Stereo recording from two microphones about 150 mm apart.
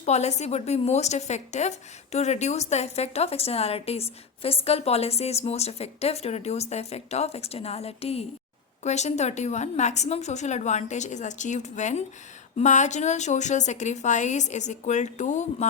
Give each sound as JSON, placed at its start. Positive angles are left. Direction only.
{"t": 0.0, "sound": "a woman's voice", "side_deg": 45}